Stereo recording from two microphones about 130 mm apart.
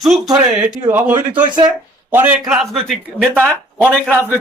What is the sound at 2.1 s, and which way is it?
Speech, 15° right (ahead or behind).